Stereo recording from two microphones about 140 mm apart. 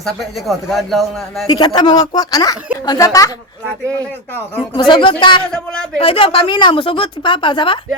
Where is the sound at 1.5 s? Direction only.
30° left (ahead or behind).